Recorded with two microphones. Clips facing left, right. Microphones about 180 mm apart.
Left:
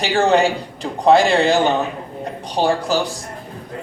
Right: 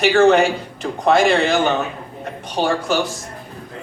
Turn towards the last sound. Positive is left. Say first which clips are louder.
# left 1 dB
turn(degrees=35)  # may be behind; listen again after turning